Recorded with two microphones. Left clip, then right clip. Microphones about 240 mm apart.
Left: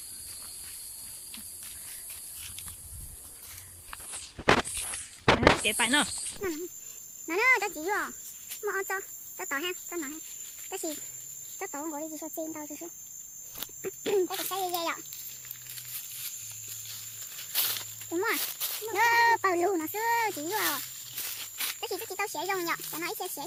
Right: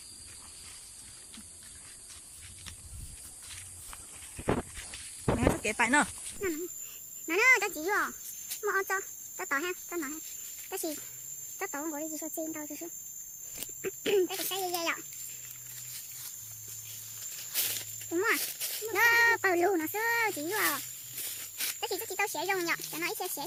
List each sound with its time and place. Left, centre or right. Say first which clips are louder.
5.2 s a sound: left 8 dB; left
5.6 s a child's voice: even; centre
17.6 s speech: left 3 dB; centre